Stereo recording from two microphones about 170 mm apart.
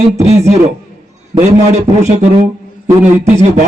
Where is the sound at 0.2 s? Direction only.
40° right (ahead or behind).